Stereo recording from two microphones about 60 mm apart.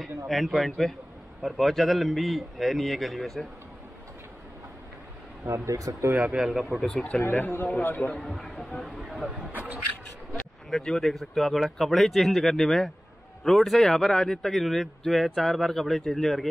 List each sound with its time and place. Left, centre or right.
0.3 s a man's voice: centre
5.4 s speech: right
5.8 s speech: right
6.1 s speech: centre
6.8 s a man's voice: centre
7.2 s a man's voice: left
8.2 s a man's voice: centre
9.5 s speech: right
10.7 s a man's voice: centre